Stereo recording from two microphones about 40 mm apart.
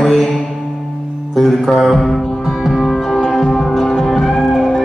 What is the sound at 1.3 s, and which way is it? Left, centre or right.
Music, centre.